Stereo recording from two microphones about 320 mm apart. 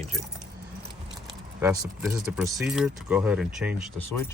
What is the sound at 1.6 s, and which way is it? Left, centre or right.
Speech, centre.